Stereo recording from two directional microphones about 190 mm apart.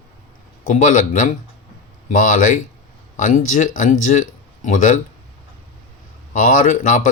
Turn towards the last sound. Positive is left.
turn(degrees=45)  # may be behind; listen again after turning